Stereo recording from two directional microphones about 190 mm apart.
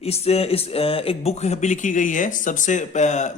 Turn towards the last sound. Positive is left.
turn(degrees=40)  # may be behind; listen again after turning